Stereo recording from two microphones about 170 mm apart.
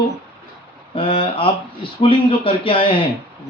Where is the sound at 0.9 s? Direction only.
30° left (ahead or behind).